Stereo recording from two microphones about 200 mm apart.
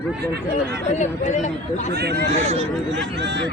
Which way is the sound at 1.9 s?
55° right (ahead or behind).